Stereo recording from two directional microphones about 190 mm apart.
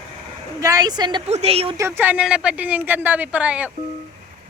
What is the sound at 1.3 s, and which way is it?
Speech, 35° right (ahead or behind).